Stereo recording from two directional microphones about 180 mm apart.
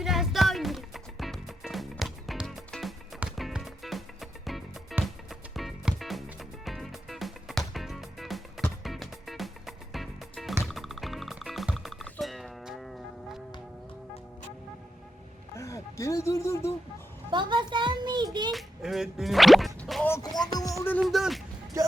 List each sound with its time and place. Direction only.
0.0 s music: centre (ahead or behind)
15.5 s a sound: 15° left (ahead or behind)
17.3 s a sound: 25° right (ahead or behind)
18.5 s music: centre (ahead or behind)
20.4 s music: 20° left (ahead or behind)
21.0 s music: centre (ahead or behind)